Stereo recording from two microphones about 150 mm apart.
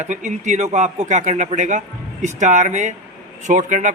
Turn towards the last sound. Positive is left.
turn(degrees=-55)  # may be behind; listen again after turning